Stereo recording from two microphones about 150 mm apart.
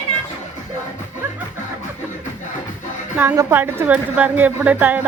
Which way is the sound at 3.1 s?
10° right (ahead or behind).